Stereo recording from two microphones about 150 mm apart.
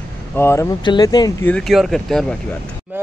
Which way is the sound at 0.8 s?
30° left (ahead or behind).